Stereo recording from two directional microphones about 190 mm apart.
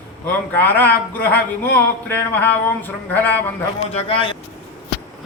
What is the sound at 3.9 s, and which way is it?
Speech, 30° left (ahead or behind).